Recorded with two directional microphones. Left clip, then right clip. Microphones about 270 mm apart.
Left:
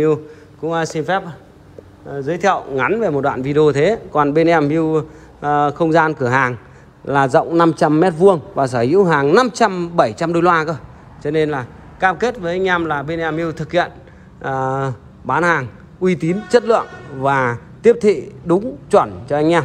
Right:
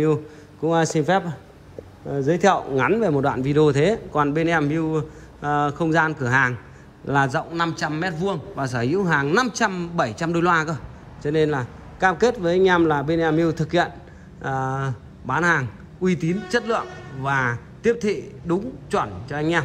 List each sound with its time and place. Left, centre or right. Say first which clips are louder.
0.0 s a man's voice: left 5 dB; centre